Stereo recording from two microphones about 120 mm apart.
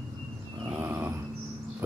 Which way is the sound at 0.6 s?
15° right (ahead or behind).